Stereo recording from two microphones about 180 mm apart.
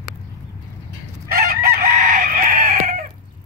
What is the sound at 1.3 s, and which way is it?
Chicken, 55° right (ahead or behind).